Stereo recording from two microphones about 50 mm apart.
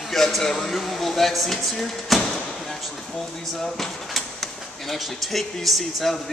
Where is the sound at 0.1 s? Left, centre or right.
Centre.